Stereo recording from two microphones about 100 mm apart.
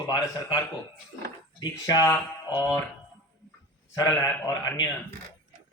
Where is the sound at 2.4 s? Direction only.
40° left (ahead or behind).